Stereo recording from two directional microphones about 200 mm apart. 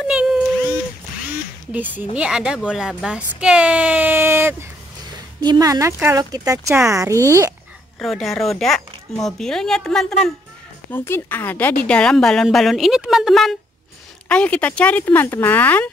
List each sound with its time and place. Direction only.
0.0 s a sound: 5° right (ahead or behind)
1.7 s a woman's voice: 10° right (ahead or behind)
8.0 s a woman's voice: centre (ahead or behind)